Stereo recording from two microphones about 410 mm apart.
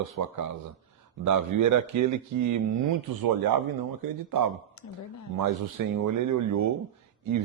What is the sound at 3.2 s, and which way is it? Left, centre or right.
Speech, right.